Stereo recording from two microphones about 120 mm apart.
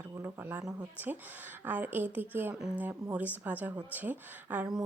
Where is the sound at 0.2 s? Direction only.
20° right (ahead or behind).